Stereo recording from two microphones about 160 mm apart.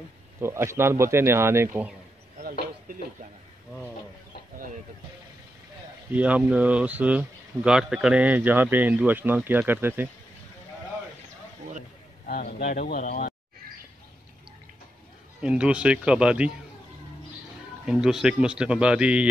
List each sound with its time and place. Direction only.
0.4 s speech: 15° right (ahead or behind)
6.1 s speech: 10° right (ahead or behind)
12.3 s speech: 70° left (ahead or behind)
15.4 s speech: 5° right (ahead or behind)
17.8 s a man's voice: 5° right (ahead or behind)